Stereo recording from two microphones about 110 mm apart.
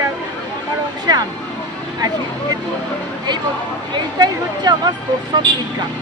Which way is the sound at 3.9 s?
40° right (ahead or behind).